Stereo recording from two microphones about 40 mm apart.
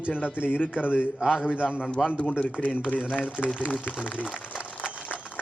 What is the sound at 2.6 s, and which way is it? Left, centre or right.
Speech, centre.